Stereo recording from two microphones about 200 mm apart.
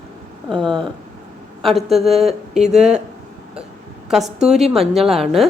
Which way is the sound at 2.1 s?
35° right (ahead or behind).